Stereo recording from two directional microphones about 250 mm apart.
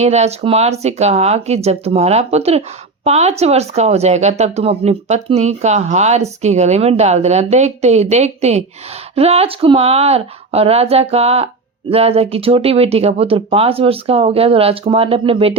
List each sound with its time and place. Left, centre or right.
0.0 s speech: right